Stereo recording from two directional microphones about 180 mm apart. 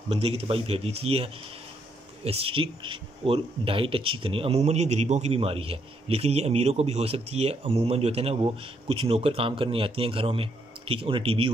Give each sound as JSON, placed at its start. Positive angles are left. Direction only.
{"t": 0.1, "sound": "speech", "side_deg": -35}